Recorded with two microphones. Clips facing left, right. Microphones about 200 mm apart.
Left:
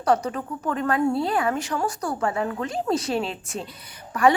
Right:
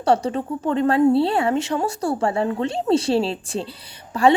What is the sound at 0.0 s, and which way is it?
A woman's voice, 30° right (ahead or behind).